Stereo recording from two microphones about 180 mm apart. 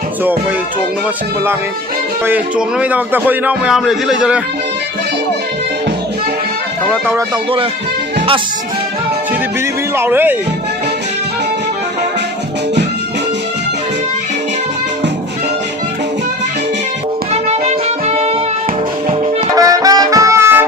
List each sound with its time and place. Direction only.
2.2 s a man's voice: 5° right (ahead or behind)
10.0 s speech: 10° right (ahead or behind)
17.3 s music: 35° right (ahead or behind)
19.5 s brass instrument: 20° right (ahead or behind)